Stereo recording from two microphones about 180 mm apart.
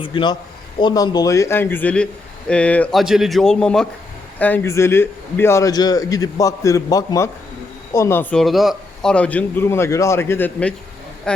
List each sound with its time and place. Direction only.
0.0 s a man's voice: 25° left (ahead or behind); by 11.4 s 5° left (ahead or behind)